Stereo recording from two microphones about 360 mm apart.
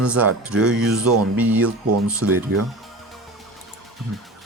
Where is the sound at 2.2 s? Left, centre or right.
Right.